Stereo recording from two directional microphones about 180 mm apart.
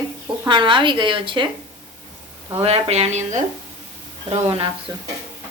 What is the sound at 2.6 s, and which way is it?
Speech, 35° right (ahead or behind).